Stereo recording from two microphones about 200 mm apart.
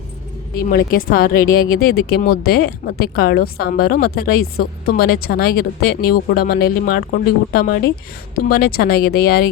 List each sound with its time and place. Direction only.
0.7 s speech: 45° left (ahead or behind)